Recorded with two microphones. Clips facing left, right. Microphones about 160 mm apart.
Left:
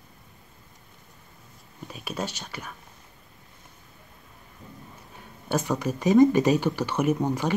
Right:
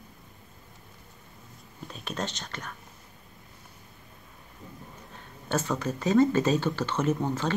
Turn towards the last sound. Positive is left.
turn(degrees=15)  # may be behind; listen again after turning